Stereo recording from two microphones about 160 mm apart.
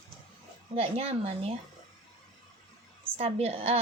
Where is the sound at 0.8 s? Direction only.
40° right (ahead or behind).